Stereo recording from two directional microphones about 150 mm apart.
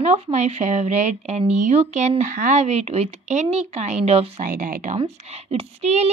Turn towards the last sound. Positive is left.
turn(degrees=-45)  # may be behind; listen again after turning